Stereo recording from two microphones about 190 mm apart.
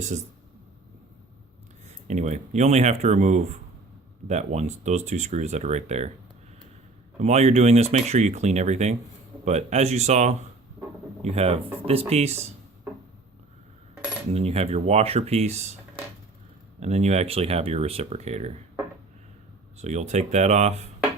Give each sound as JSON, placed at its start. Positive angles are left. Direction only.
{"t": 2.0, "sound": "speech", "side_deg": -40}
{"t": 7.2, "sound": "speech", "side_deg": -35}
{"t": 13.9, "sound": "cutlery", "side_deg": -5}
{"t": 14.3, "sound": "speech", "side_deg": -30}
{"t": 16.8, "sound": "speech", "side_deg": -35}
{"t": 19.8, "sound": "speech", "side_deg": -35}